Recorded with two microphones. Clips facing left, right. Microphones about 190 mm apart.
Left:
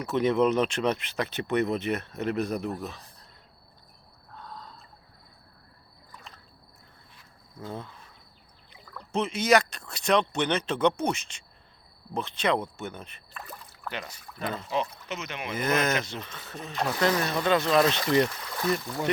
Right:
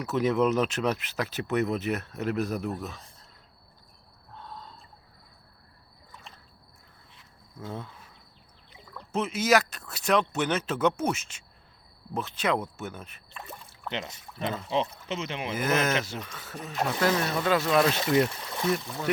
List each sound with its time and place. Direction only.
0.0 s speech: centre (ahead or behind)
7.6 s speech: centre (ahead or behind)
9.1 s speech: 5° right (ahead or behind)
13.3 s speech: 25° right (ahead or behind)
15.5 s speech: 5° right (ahead or behind)